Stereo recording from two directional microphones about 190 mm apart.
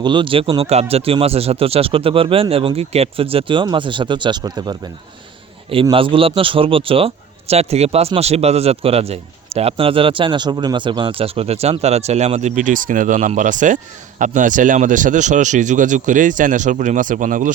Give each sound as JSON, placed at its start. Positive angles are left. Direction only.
{"t": 0.0, "sound": "speech", "side_deg": -25}
{"t": 5.7, "sound": "speech", "side_deg": -30}